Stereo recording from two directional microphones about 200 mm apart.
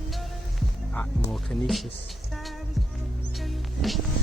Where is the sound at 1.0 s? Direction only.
Centre (ahead or behind).